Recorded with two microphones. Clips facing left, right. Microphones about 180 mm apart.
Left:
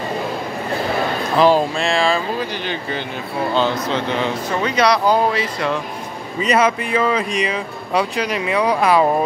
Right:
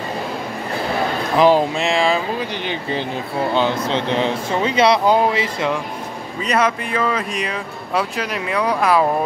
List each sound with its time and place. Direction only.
1.4 s speech: 20° right (ahead or behind)
4.1 s speech: 25° right (ahead or behind)
6.4 s speech: centre (ahead or behind)